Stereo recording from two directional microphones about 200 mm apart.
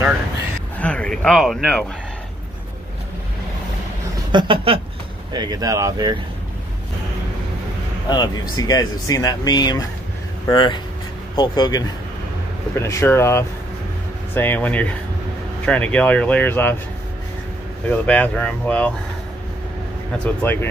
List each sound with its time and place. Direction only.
0.7 s speech: 5° left (ahead or behind)
4.3 s speech: 25° right (ahead or behind)
8.1 s speech: 20° left (ahead or behind)
17.8 s speech: 10° left (ahead or behind)
20.4 s speech: 10° left (ahead or behind)